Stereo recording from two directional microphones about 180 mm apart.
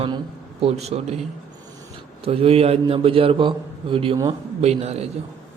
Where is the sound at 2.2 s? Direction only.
30° right (ahead or behind).